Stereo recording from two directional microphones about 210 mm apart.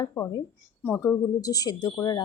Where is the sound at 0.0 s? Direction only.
15° left (ahead or behind).